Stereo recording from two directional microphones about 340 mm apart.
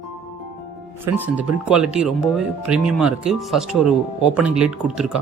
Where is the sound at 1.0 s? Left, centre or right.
Centre.